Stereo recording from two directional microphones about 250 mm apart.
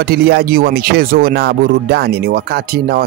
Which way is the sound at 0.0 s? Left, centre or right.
Right.